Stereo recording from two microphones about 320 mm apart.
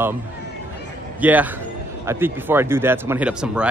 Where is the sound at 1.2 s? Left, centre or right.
Centre.